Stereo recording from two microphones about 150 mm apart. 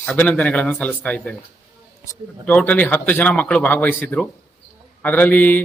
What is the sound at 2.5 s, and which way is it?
Speech, 10° left (ahead or behind).